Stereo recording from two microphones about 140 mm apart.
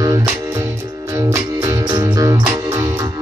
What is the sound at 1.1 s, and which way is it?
Music, 25° right (ahead or behind).